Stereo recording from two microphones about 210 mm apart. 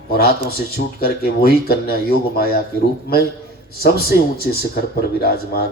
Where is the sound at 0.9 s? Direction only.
45° left (ahead or behind).